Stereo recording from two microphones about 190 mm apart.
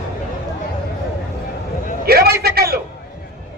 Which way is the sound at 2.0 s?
55° right (ahead or behind).